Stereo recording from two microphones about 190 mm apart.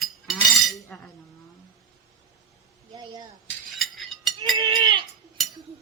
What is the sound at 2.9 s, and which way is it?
Speech, 20° right (ahead or behind).